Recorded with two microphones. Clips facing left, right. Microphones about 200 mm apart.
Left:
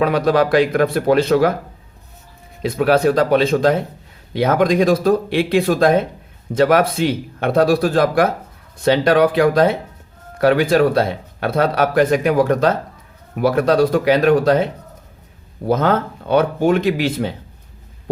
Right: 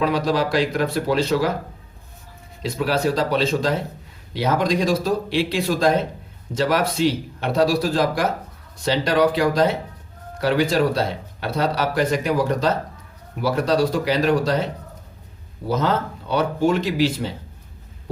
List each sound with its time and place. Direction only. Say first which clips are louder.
0.0 s speech: left 5 dB; 55° left (ahead or behind)
2.6 s speech: left 7 dB; 55° left (ahead or behind)